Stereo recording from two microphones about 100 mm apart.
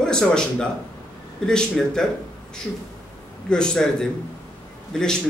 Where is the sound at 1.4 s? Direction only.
5° left (ahead or behind).